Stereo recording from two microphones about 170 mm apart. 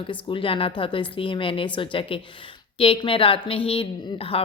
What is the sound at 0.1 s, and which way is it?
A woman's voice, 30° left (ahead or behind).